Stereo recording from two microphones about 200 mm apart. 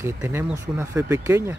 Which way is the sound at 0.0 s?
15° right (ahead or behind).